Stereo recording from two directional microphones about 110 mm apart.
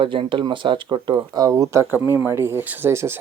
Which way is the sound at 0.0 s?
50° right (ahead or behind).